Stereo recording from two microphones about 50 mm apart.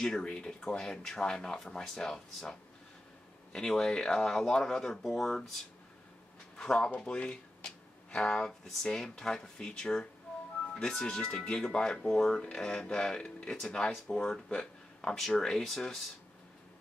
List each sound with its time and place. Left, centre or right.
0.0 s speech: centre
3.5 s speech: centre
6.5 s speech: centre
15.0 s speech: centre